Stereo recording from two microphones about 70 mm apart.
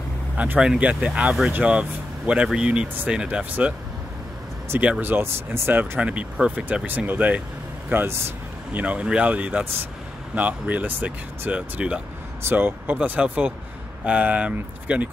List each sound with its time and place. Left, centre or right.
0.6 s speech: centre
4.7 s speech: centre
5.0 s speech: right
5.9 s speech: centre
8.7 s speech: centre